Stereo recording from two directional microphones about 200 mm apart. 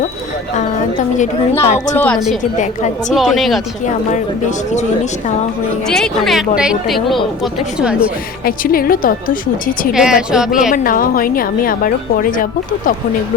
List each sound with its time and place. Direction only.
0.9 s a woman's voice: 40° left (ahead or behind)
2.0 s a woman's voice: 5° left (ahead or behind)
5.9 s a woman's voice: centre (ahead or behind)
8.4 s a woman's voice: 45° left (ahead or behind)
9.9 s a woman's voice: 5° right (ahead or behind)
10.5 s a woman's voice: 45° left (ahead or behind)